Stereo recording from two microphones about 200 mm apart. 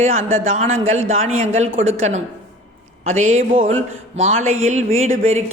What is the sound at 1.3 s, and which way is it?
Speech, 35° right (ahead or behind).